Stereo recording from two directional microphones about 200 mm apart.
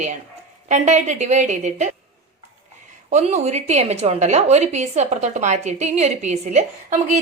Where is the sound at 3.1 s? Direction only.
35° right (ahead or behind).